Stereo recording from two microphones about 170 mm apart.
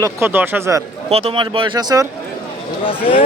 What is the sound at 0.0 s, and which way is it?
Speech, 15° right (ahead or behind).